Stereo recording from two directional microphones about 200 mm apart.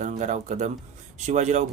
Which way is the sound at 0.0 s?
35° right (ahead or behind).